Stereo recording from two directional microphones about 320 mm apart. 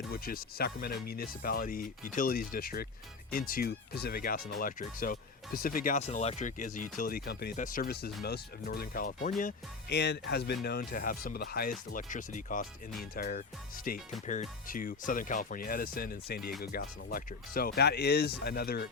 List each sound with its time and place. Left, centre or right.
0.1 s speech: left